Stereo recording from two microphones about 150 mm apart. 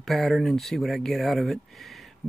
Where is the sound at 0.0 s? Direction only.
Centre (ahead or behind).